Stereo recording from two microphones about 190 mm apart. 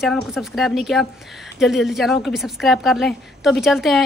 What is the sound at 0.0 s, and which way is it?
Speech, centre (ahead or behind).